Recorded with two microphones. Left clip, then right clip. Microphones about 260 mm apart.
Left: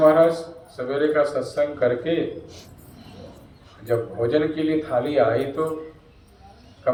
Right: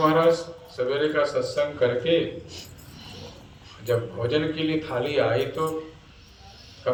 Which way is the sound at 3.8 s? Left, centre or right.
Centre.